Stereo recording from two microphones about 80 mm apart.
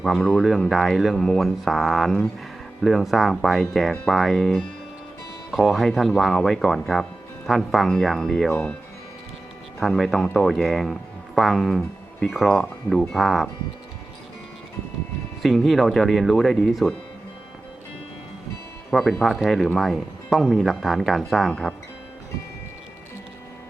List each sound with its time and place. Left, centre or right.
0.0 s speech: centre
9.8 s speech: centre
15.4 s speech: centre
18.9 s speech: centre